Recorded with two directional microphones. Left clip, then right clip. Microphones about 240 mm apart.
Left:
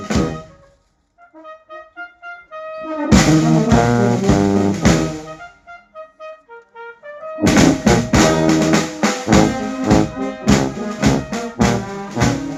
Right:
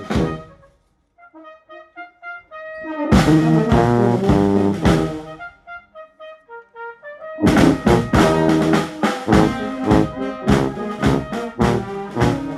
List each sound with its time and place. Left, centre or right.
0.0 s music: left
2.8 s music: left
7.3 s music: left